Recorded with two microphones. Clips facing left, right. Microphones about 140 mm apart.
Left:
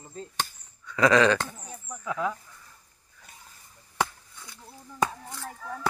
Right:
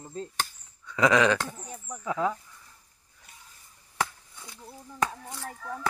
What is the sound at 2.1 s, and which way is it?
Speech, 30° right (ahead or behind).